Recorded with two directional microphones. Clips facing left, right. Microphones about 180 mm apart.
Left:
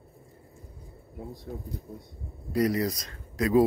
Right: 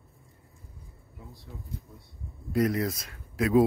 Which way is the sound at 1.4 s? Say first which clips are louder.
Left 6 dB; 35° left (ahead or behind).